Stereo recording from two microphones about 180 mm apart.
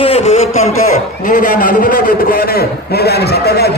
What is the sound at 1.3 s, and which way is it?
A man's voice, 50° left (ahead or behind).